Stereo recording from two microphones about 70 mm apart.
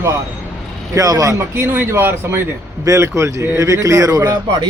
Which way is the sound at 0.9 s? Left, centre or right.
Right.